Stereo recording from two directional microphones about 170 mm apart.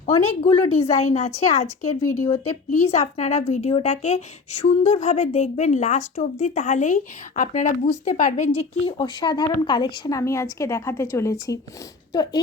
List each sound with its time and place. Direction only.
0.0 s speech: 35° left (ahead or behind)
2.7 s a woman's voice: 40° left (ahead or behind); by 12.4 s 25° left (ahead or behind)